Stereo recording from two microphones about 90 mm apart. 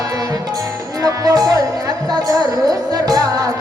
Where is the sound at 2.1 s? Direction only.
45° right (ahead or behind).